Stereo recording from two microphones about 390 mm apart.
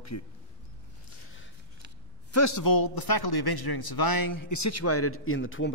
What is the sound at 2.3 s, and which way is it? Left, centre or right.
A man's voice, left.